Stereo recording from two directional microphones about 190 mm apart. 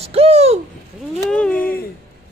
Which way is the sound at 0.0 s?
30° right (ahead or behind).